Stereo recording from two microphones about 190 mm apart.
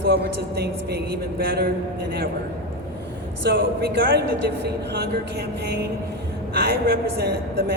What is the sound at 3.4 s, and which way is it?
A man's voice, 55° right (ahead or behind).